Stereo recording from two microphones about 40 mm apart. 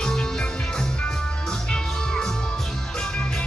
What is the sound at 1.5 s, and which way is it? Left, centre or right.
Music, centre.